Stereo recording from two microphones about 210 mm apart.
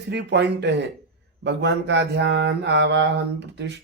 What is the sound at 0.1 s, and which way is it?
Mantra, 55° right (ahead or behind).